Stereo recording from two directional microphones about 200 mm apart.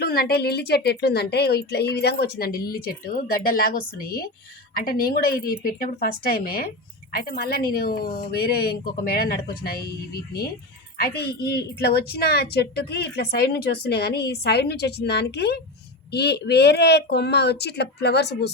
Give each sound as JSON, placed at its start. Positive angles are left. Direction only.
{"t": 0.0, "sound": "speech", "side_deg": 50}